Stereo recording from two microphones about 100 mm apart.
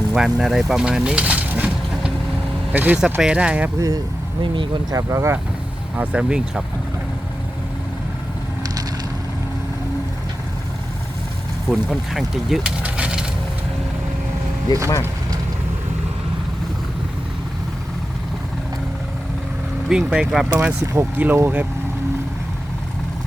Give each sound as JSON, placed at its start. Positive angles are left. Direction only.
{"t": 0.1, "sound": "a sound", "side_deg": -5}
{"t": 2.7, "sound": "speech", "side_deg": -15}
{"t": 3.8, "sound": "speech", "side_deg": -30}
{"t": 4.5, "sound": "speech", "side_deg": -55}
{"t": 4.9, "sound": "speech", "side_deg": -30}
{"t": 6.0, "sound": "speech", "side_deg": -10}
{"t": 11.7, "sound": "speech", "side_deg": 0}
{"t": 12.8, "sound": "coin", "side_deg": -10}
{"t": 14.7, "sound": "speech", "side_deg": 40}
{"t": 19.9, "sound": "speech", "side_deg": -10}
{"t": 20.8, "sound": "speech", "side_deg": -30}